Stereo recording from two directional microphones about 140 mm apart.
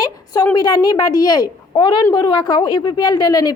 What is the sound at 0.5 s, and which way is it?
A woman's voice, 30° left (ahead or behind).